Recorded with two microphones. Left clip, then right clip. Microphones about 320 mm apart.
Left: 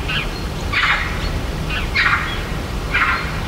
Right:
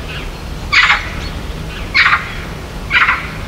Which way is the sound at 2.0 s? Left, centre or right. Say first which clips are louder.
Right 6 dB; right.